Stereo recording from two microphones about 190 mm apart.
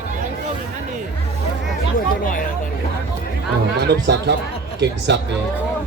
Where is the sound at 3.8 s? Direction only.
60° right (ahead or behind).